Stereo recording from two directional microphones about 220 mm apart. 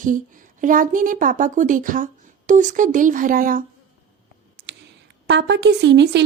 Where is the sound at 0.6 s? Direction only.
35° right (ahead or behind).